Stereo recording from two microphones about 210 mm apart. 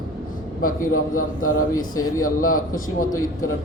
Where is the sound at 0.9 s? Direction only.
90° left.